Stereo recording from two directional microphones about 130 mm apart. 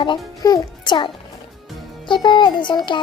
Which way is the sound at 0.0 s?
35° left (ahead or behind).